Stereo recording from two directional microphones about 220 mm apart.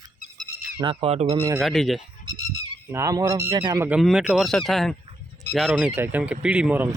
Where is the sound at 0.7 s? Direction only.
25° right (ahead or behind).